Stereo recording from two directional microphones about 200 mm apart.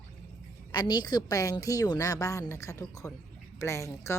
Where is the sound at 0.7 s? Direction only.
20° left (ahead or behind).